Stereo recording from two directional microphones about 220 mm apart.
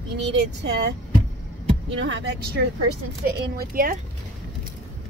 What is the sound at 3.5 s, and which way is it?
Speech, 40° right (ahead or behind).